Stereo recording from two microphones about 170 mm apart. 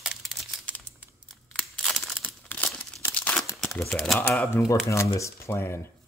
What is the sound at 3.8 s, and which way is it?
Speech, 5° left (ahead or behind).